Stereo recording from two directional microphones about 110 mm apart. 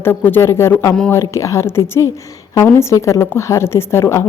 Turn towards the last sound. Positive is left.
turn(degrees=25)  # may be behind; listen again after turning